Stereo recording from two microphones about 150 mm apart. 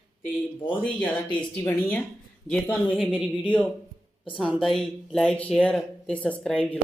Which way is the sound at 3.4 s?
10° left (ahead or behind).